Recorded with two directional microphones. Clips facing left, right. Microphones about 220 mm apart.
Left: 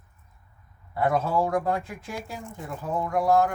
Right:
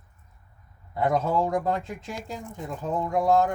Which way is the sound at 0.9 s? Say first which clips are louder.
Even; 20° right (ahead or behind).